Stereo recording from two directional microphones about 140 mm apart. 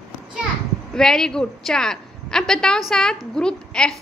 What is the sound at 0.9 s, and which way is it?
A woman's voice, 5° left (ahead or behind).